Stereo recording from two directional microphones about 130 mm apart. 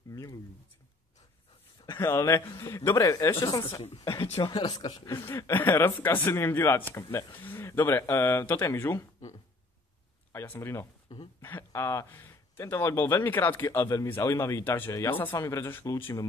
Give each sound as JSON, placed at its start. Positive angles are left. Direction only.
{"t": 0.1, "sound": "a sound", "side_deg": 25}
{"t": 1.9, "sound": "speech", "side_deg": 20}
{"t": 10.3, "sound": "speech", "side_deg": 20}